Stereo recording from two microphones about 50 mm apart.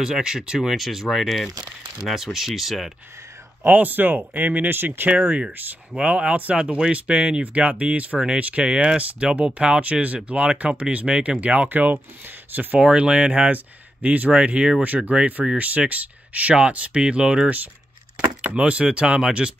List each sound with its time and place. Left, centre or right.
0.0 s speech: centre
3.6 s speech: right
5.9 s speech: right
7.4 s speech: right
12.8 s speech: centre